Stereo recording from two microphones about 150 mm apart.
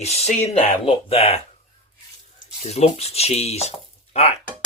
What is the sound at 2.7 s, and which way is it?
Speech, 45° left (ahead or behind).